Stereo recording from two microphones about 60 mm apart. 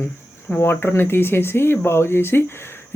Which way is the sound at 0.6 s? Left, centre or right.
Left.